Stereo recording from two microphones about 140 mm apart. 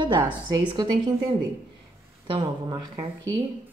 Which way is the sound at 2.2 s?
40° right (ahead or behind).